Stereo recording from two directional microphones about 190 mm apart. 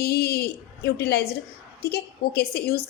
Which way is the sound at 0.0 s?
60° left (ahead or behind).